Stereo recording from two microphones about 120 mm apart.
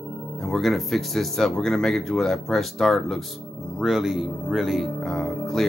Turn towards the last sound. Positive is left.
turn(degrees=0)  # may be behind; listen again after turning